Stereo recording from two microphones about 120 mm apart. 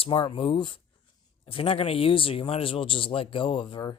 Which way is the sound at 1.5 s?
55° left (ahead or behind).